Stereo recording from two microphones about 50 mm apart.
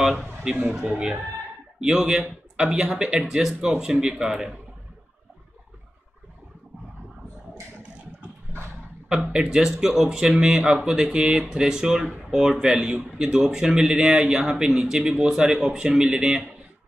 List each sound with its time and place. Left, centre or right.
0.5 s speech: centre
9.2 s speech: centre